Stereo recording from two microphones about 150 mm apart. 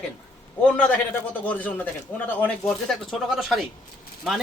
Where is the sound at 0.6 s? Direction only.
10° left (ahead or behind).